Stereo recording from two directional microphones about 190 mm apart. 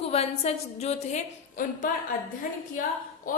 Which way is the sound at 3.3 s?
45° left (ahead or behind).